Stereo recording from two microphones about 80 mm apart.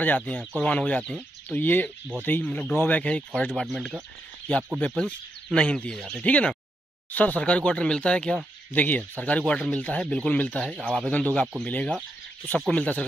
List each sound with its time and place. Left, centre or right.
0.0 s speech: centre
3.6 s speech: centre
4.9 s speech: centre
11.1 s speech: centre